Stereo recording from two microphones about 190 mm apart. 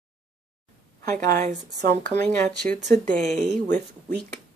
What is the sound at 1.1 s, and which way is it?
Speech, 45° right (ahead or behind).